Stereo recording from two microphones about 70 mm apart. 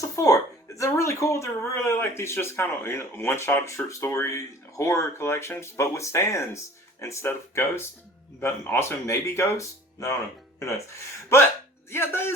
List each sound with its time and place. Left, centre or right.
0.2 s speech: left
11.9 s speech: left